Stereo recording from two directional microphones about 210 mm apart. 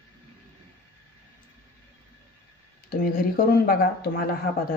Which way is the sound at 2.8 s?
45° left (ahead or behind).